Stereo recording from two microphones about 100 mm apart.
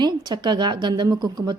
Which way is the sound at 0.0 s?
45° right (ahead or behind).